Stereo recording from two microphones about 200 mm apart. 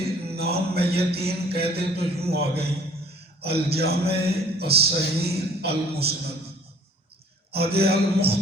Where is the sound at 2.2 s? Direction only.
55° right (ahead or behind).